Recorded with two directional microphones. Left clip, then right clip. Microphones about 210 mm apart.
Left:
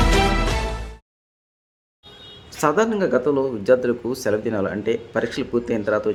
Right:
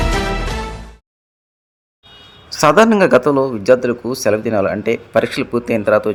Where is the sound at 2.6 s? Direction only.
35° right (ahead or behind).